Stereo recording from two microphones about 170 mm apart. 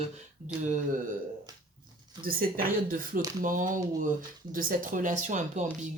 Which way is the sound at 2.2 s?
55° right (ahead or behind).